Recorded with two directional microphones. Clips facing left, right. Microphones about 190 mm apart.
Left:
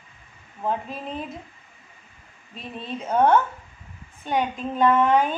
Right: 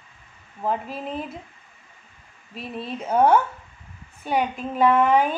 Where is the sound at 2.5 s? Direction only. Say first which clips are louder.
Right 2 dB; 5° right (ahead or behind).